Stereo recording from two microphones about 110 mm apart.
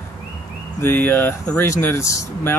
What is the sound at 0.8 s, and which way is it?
Speech, 20° left (ahead or behind).